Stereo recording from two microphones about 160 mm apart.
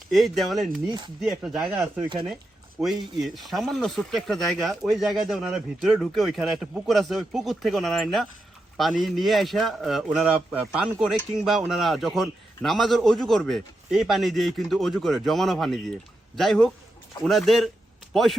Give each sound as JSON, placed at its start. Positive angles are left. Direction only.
{"t": 0.1, "sound": "speech", "side_deg": 0}
{"t": 0.9, "sound": "speech", "side_deg": -30}
{"t": 1.2, "sound": "speech", "side_deg": 0}